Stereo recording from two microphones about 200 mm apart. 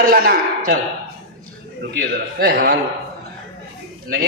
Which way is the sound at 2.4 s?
50° right (ahead or behind).